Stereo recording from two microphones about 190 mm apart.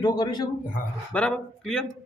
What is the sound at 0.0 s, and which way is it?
Speech, 25° left (ahead or behind).